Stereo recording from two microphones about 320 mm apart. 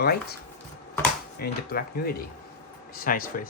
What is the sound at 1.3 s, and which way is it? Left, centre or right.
Speech, left.